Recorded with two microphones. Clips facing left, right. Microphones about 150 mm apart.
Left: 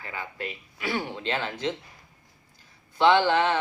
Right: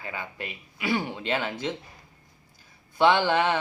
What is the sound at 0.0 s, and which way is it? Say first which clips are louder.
Speech: left 1 dB; 15° right (ahead or behind).